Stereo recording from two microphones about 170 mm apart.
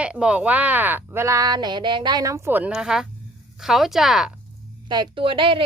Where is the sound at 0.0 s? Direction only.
5° right (ahead or behind).